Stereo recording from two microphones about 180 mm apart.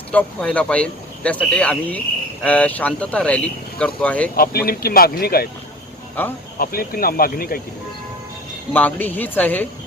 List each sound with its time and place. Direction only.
0.1 s speech: 10° left (ahead or behind)
4.4 s speech: 55° left (ahead or behind)
6.6 s speech: 55° left (ahead or behind)
8.7 s speech: 10° left (ahead or behind)